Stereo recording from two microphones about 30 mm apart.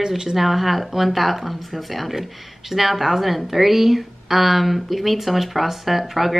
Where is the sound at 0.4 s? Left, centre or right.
Centre.